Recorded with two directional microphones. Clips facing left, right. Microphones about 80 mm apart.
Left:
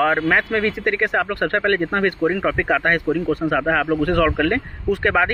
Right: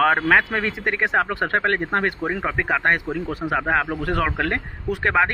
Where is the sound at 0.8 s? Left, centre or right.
Right.